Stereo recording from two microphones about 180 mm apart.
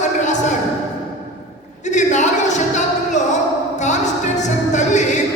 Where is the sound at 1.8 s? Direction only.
40° left (ahead or behind).